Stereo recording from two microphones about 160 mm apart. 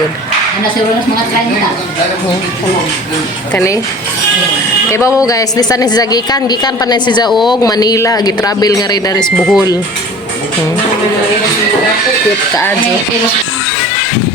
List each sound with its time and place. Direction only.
4.9 s a woman's voice: 15° left (ahead or behind)
7.3 s speech: centre (ahead or behind)
7.6 s a woman's voice: 25° left (ahead or behind)
9.4 s speech: 5° right (ahead or behind)